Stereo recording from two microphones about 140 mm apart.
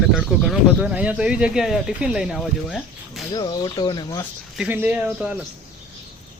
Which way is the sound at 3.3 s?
25° left (ahead or behind).